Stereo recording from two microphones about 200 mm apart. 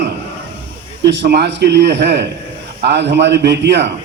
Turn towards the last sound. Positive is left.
turn(degrees=-55)  # may be behind; listen again after turning